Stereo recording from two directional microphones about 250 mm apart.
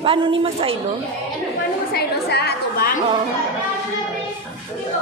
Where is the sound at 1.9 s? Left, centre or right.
Left.